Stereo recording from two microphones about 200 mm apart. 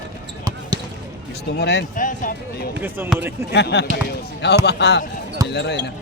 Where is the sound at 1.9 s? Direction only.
40° left (ahead or behind).